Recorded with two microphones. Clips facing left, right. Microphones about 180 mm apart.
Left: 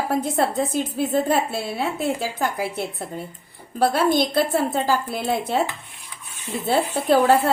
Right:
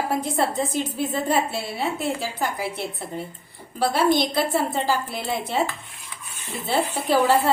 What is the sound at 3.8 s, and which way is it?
A woman's voice, 55° left (ahead or behind).